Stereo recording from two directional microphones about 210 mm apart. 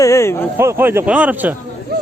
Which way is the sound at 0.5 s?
10° right (ahead or behind).